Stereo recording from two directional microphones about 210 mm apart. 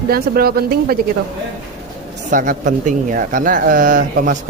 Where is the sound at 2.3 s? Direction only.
40° right (ahead or behind).